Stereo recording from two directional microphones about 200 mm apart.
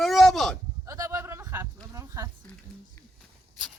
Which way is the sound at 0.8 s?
15° right (ahead or behind).